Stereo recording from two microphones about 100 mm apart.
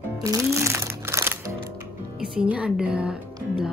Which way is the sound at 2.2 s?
10° right (ahead or behind).